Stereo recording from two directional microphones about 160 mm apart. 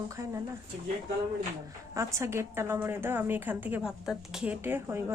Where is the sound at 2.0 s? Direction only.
15° right (ahead or behind).